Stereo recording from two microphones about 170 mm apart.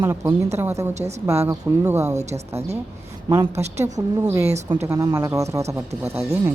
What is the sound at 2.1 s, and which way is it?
Speech, 40° right (ahead or behind).